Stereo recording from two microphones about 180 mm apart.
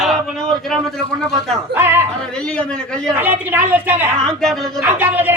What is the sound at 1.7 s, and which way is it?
Speech, 15° right (ahead or behind).